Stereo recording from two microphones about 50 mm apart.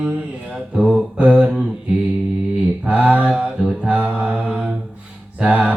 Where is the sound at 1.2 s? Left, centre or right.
Right.